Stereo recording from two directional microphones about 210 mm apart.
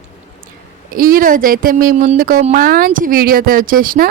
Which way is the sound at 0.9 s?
45° right (ahead or behind).